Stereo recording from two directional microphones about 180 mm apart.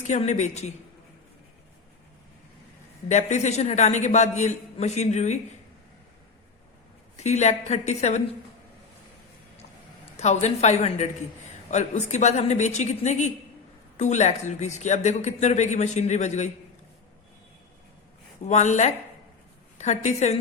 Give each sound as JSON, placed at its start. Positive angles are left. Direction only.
{"t": 0.1, "sound": "speech", "side_deg": 40}
{"t": 3.1, "sound": "speech", "side_deg": 40}
{"t": 7.2, "sound": "speech", "side_deg": 40}
{"t": 10.2, "sound": "speech", "side_deg": 40}
{"t": 18.4, "sound": "speech", "side_deg": 40}